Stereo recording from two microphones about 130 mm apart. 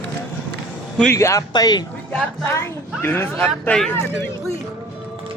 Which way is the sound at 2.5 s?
20° left (ahead or behind).